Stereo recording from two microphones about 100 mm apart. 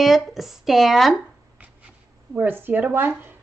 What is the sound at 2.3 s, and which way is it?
Speech, 20° right (ahead or behind).